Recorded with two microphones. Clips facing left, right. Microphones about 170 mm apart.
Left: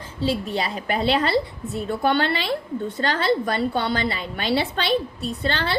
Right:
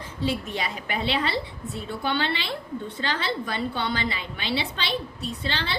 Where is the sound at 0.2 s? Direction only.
30° left (ahead or behind).